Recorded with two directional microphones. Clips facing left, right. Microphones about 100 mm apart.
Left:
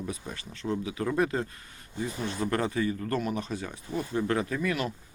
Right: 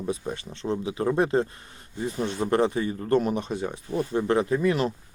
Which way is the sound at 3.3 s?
25° right (ahead or behind).